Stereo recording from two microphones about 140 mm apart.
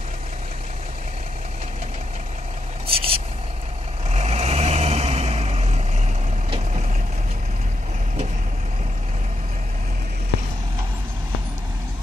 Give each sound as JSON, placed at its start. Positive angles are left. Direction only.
{"t": 2.9, "sound": "vehicle", "side_deg": -40}